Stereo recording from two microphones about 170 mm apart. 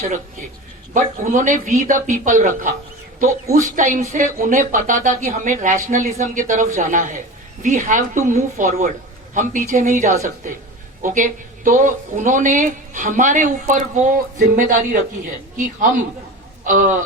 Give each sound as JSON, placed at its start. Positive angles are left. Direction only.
{"t": 0.9, "sound": "speech", "side_deg": -50}